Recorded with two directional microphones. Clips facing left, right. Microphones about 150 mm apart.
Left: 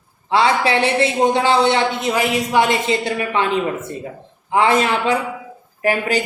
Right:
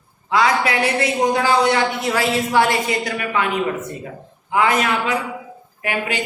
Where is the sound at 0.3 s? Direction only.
30° left (ahead or behind).